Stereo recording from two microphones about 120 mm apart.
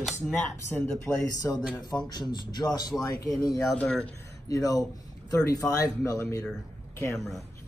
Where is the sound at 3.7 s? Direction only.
10° left (ahead or behind).